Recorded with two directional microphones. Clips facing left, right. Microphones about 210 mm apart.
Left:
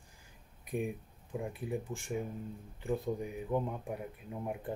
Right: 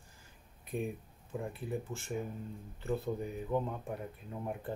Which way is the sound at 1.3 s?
15° left (ahead or behind).